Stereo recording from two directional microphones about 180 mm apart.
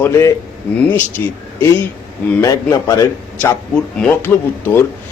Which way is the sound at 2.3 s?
20° left (ahead or behind).